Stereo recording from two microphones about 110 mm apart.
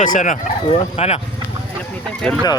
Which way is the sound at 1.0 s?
65° left (ahead or behind).